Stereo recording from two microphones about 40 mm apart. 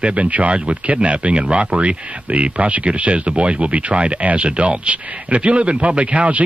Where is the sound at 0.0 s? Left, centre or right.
Right.